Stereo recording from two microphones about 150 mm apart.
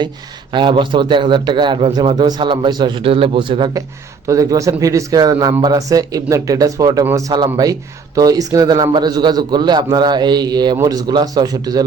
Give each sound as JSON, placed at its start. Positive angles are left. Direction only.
{"t": 0.5, "sound": "a man's voice", "side_deg": -30}
{"t": 4.3, "sound": "speech", "side_deg": -20}